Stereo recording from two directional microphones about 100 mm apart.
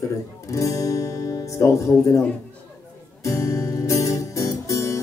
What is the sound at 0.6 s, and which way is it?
Guitar, 35° left (ahead or behind).